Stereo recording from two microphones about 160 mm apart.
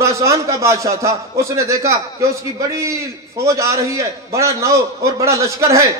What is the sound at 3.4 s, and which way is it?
A man's voice, 20° right (ahead or behind).